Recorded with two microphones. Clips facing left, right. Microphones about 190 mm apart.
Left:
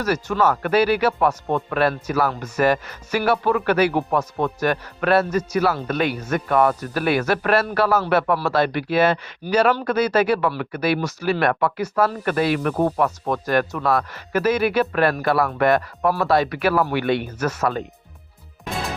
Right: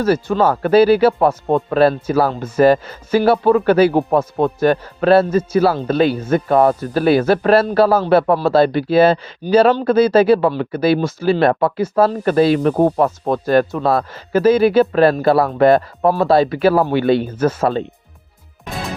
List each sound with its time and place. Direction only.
0.0 s speech: 30° right (ahead or behind)